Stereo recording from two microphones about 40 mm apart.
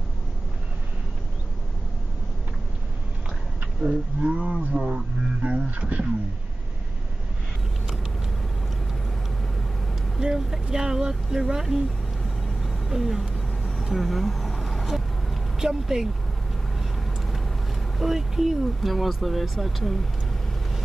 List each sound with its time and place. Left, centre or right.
3.8 s speech: centre
4.2 s roaring cats: right
4.8 s speech: right
5.8 s roaring cats: right
10.2 s speech: centre
12.2 s vehicle: centre
12.9 s speech: centre
13.9 s vehicle: centre
15.6 s speech: centre
17.9 s speech: centre